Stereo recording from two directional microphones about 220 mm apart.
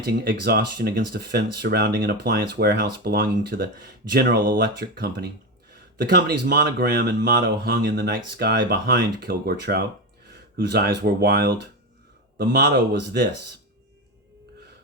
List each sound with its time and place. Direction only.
0.0 s speech: 45° right (ahead or behind)